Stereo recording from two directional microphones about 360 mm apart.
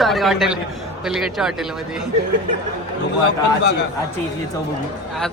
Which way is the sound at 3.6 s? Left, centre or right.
Left.